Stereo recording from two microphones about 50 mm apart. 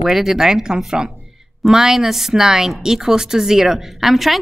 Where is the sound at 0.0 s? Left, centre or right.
Centre.